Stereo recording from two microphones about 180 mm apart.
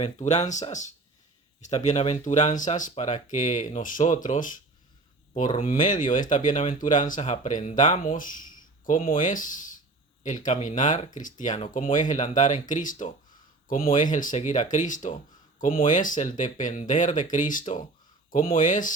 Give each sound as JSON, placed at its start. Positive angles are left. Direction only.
{"t": 0.0, "sound": "speech", "side_deg": 40}
{"t": 5.5, "sound": "speech", "side_deg": 35}